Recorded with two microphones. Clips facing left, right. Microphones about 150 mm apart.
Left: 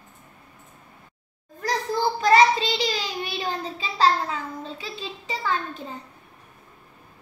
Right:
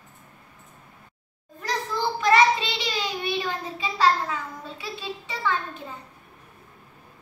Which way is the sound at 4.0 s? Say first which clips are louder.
Left 1 dB; 30° left (ahead or behind).